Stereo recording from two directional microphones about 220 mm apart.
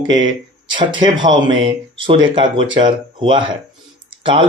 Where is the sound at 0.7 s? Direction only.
20° right (ahead or behind).